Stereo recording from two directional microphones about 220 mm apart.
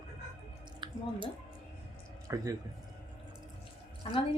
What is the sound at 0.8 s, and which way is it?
Drip, 20° right (ahead or behind).